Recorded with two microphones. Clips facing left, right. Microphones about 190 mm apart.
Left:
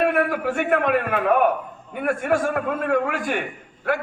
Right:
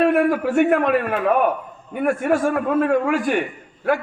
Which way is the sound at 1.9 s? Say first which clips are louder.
Right 3 dB; 50° right (ahead or behind).